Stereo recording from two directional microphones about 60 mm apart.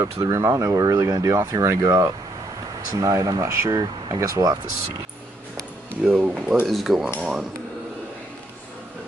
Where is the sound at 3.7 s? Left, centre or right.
Right.